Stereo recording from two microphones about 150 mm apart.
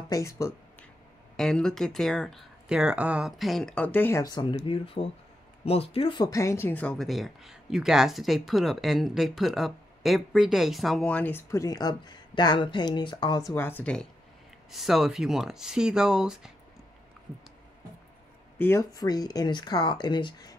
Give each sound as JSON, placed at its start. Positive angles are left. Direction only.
{"t": 0.1, "sound": "speech", "side_deg": 20}
{"t": 1.3, "sound": "speech", "side_deg": 5}
{"t": 4.2, "sound": "speech", "side_deg": 30}
{"t": 13.6, "sound": "speech", "side_deg": 15}
{"t": 14.7, "sound": "speech", "side_deg": 0}
{"t": 18.6, "sound": "speech", "side_deg": 20}